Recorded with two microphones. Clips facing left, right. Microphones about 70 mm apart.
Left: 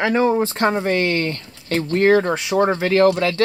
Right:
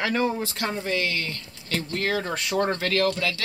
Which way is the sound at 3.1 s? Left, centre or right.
Left.